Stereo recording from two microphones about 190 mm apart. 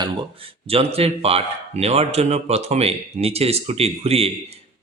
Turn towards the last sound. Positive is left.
turn(degrees=-35)  # may be behind; listen again after turning